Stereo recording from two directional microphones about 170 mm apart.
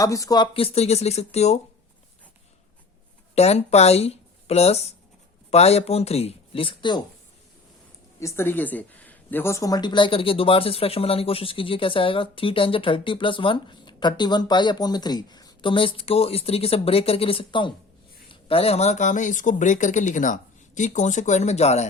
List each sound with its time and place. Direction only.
0.0 s speech: 20° left (ahead or behind); by 1.6 s 40° left (ahead or behind)
3.3 s speech: 40° left (ahead or behind)
8.2 s speech: 15° left (ahead or behind); by 21.8 s 40° left (ahead or behind)